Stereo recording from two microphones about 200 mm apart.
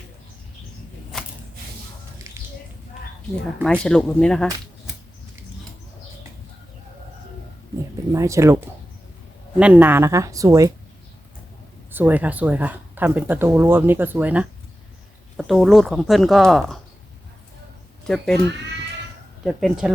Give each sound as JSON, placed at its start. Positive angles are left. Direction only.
{"t": 2.3, "sound": "a sound", "side_deg": -15}
{"t": 3.7, "sound": "speech", "side_deg": 5}
{"t": 8.1, "sound": "speech", "side_deg": -15}
{"t": 11.9, "sound": "speech", "side_deg": -10}
{"t": 18.0, "sound": "speech", "side_deg": 0}
{"t": 19.5, "sound": "speech", "side_deg": 0}